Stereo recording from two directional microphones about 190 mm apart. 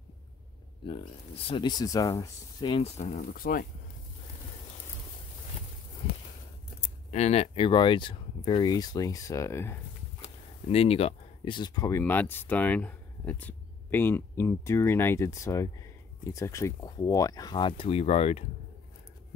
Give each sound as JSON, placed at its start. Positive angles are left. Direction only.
{"t": 1.5, "sound": "speech", "side_deg": 20}
{"t": 3.0, "sound": "speech", "side_deg": 45}
{"t": 7.1, "sound": "speech", "side_deg": 35}
{"t": 10.2, "sound": "speech", "side_deg": 30}